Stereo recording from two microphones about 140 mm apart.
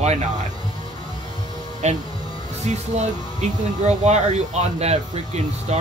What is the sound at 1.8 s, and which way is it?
Speech, 55° right (ahead or behind).